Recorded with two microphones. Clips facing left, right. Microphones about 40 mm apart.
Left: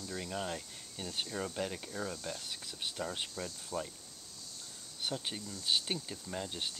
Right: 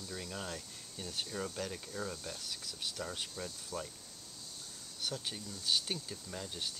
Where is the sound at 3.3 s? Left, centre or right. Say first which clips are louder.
Left 3 dB; centre.